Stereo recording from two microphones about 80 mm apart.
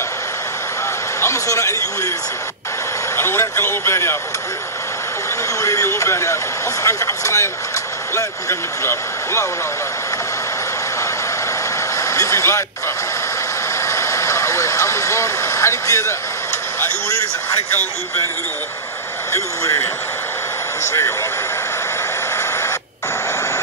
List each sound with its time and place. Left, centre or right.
1.2 s speech: left
3.2 s speech: left
5.6 s speech: left
12.0 s speech: left
13.7 s vehicle: left
19.3 s speech: left
22.4 s rodents: left